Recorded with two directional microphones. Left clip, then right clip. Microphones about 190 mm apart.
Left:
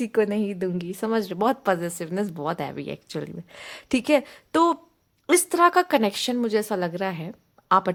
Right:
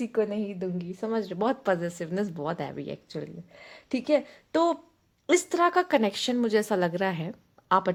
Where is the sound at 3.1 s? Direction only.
25° left (ahead or behind).